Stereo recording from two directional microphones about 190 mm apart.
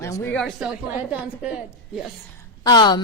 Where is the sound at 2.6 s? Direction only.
20° left (ahead or behind).